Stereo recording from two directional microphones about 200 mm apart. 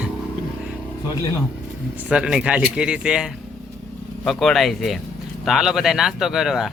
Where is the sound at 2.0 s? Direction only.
5° right (ahead or behind).